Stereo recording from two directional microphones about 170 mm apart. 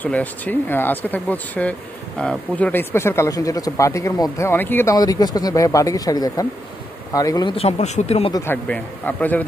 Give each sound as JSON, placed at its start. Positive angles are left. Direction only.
{"t": 0.0, "sound": "speech", "side_deg": 10}
{"t": 7.5, "sound": "speech", "side_deg": 40}
{"t": 8.5, "sound": "speech", "side_deg": 10}